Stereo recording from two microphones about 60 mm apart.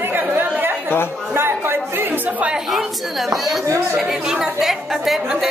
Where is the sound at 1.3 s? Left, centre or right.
Right.